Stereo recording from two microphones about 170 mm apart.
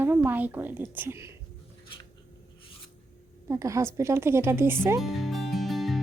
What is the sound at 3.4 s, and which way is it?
A woman's voice, 20° right (ahead or behind).